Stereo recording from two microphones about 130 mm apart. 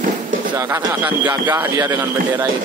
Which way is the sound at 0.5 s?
20° right (ahead or behind).